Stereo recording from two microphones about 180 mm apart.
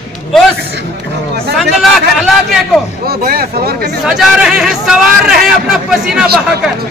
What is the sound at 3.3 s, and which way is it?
Speech, 55° right (ahead or behind).